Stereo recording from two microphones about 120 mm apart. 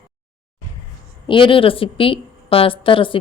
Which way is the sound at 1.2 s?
45° left (ahead or behind).